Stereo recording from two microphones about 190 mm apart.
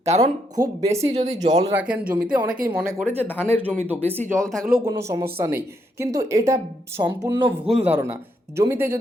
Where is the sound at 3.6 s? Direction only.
10° right (ahead or behind).